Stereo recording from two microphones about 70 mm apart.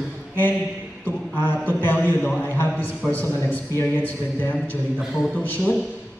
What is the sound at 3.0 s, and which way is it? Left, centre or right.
Speech, centre.